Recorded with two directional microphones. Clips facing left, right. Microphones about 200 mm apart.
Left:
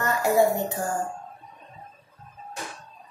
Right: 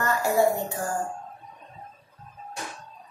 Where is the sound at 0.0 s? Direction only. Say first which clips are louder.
Left 1 dB; 20° left (ahead or behind).